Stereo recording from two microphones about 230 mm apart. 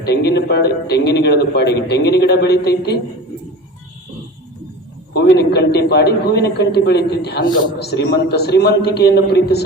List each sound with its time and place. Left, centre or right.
0.0 s a man's voice: left
5.1 s a man's voice: left